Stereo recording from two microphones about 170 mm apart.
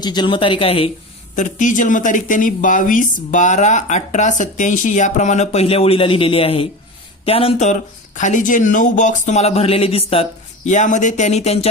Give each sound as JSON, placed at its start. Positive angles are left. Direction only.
{"t": 0.0, "sound": "speech", "side_deg": 25}
{"t": 1.4, "sound": "speech", "side_deg": 45}
{"t": 10.7, "sound": "speech", "side_deg": 45}